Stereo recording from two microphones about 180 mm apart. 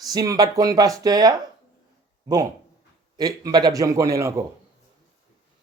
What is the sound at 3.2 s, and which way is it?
Speech, 20° right (ahead or behind).